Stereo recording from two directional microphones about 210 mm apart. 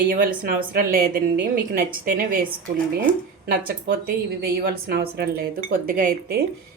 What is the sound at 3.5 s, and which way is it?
Speech, 45° right (ahead or behind).